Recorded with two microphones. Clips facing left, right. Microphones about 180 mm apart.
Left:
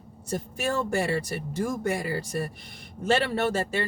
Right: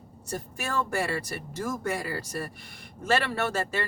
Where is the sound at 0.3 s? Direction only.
20° left (ahead or behind).